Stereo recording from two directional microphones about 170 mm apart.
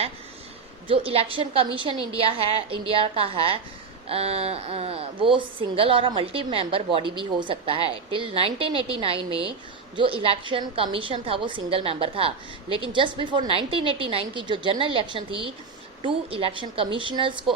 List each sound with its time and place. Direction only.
0.9 s a woman's voice: 35° right (ahead or behind)